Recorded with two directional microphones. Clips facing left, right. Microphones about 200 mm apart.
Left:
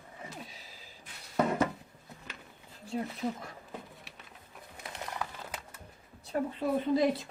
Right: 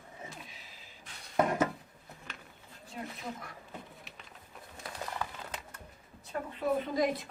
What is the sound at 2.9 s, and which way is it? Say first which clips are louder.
Speech: left 8 dB; 30° left (ahead or behind).